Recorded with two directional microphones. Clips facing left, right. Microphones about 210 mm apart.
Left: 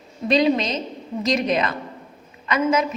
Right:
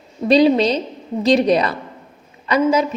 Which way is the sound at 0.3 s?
35° right (ahead or behind).